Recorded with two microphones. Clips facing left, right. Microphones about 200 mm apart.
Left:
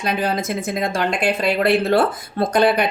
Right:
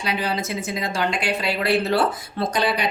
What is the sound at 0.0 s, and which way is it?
Speech, 50° left (ahead or behind).